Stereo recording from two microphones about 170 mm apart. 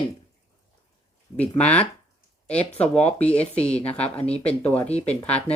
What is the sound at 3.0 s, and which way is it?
Speech, 40° left (ahead or behind).